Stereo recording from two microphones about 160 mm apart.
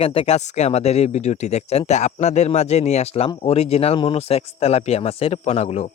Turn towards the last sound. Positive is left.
turn(degrees=40)  # may be behind; listen again after turning